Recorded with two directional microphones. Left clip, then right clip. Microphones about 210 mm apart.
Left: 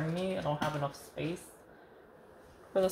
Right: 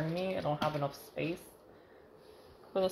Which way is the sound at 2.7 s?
5° right (ahead or behind).